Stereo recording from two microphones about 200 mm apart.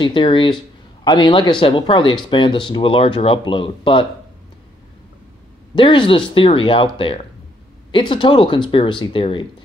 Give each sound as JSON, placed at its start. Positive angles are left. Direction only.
{"t": 0.0, "sound": "speech", "side_deg": 25}
{"t": 5.8, "sound": "speech", "side_deg": 25}